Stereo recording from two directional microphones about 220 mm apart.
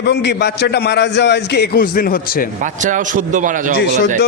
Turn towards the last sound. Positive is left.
turn(degrees=50)  # may be behind; listen again after turning